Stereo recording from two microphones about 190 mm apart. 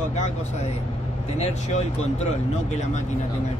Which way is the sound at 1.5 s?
35° left (ahead or behind).